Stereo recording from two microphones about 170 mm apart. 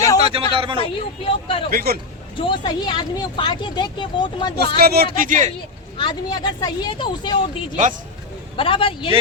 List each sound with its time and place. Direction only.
0.2 s speech: 35° right (ahead or behind)
0.8 s speech: 30° left (ahead or behind)
1.7 s speech: 65° right (ahead or behind)
2.4 s speech: 25° left (ahead or behind)
4.8 s speech: 65° right (ahead or behind)
6.0 s speech: 25° left (ahead or behind)
8.5 s speech: 30° left (ahead or behind)